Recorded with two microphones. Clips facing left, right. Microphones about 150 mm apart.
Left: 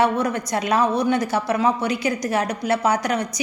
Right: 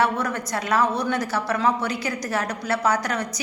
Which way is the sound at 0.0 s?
15° left (ahead or behind).